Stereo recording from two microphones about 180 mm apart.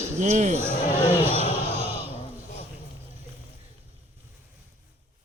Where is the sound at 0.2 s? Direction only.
40° right (ahead or behind).